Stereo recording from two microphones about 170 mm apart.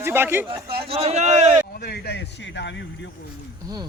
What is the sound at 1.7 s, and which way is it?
A man's voice, 70° left (ahead or behind).